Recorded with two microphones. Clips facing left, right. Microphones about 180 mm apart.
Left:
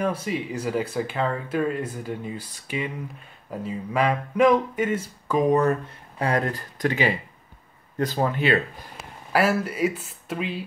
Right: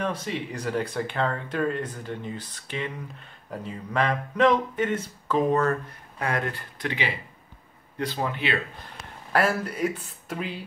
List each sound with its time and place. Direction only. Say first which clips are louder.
0.0 s speech: left 3 dB; 10° left (ahead or behind)
6.1 s speech: left 4 dB; 35° left (ahead or behind)
8.9 s speech: left 1 dB; 5° left (ahead or behind)